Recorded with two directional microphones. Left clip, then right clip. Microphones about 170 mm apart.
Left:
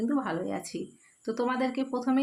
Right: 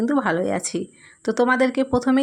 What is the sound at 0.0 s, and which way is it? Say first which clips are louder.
Speech: right 10 dB; 45° right (ahead or behind).